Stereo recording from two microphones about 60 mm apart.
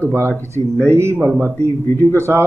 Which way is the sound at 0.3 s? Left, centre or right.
Left.